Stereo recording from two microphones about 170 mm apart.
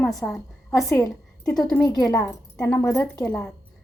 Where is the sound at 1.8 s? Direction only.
25° left (ahead or behind); by 3.5 s 5° left (ahead or behind).